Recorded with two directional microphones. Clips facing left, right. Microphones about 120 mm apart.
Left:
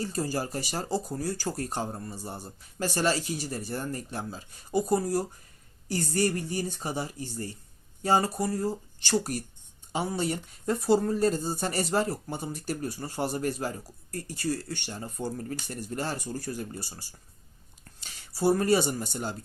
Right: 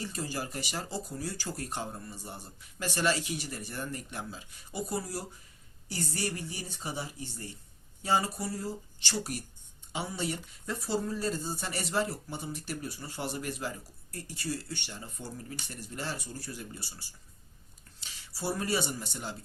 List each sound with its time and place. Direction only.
0.0 s speech: 40° left (ahead or behind)